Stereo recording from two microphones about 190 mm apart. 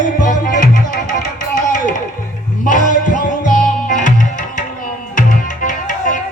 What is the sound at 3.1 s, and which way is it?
Music, 40° left (ahead or behind).